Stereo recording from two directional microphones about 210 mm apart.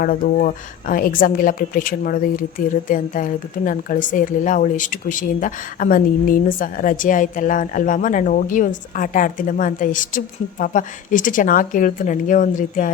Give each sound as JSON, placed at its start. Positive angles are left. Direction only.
{"t": 0.0, "sound": "a woman's voice", "side_deg": 40}